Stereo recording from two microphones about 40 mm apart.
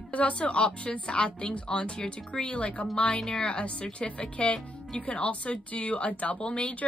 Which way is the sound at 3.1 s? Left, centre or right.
Centre.